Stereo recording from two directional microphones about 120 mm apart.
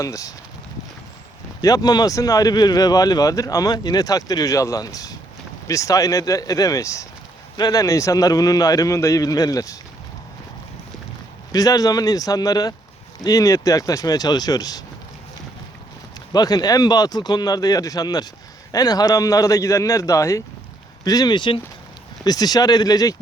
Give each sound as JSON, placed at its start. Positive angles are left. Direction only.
{"t": 0.0, "sound": "a man's voice", "side_deg": 30}
{"t": 1.6, "sound": "a man's voice", "side_deg": 35}
{"t": 11.5, "sound": "speech", "side_deg": 30}
{"t": 16.3, "sound": "a man's voice", "side_deg": 35}